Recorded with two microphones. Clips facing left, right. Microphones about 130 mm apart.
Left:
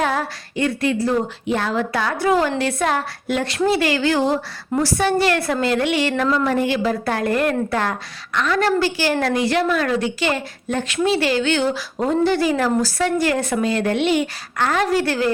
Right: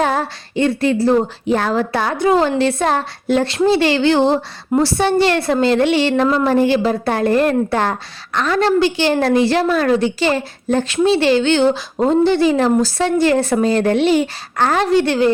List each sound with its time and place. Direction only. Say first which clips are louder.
0.0 s a woman's voice: right 3 dB; 30° right (ahead or behind)
14.8 s a woman's voice: right 5 dB; 25° right (ahead or behind)